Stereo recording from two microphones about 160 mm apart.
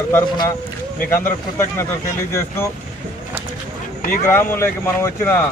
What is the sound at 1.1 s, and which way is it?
Speech, 15° left (ahead or behind).